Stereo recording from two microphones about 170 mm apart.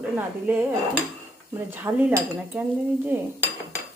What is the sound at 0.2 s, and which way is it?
Speech, 10° right (ahead or behind).